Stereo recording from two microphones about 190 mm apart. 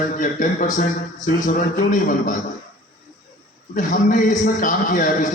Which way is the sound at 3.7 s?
45° left (ahead or behind).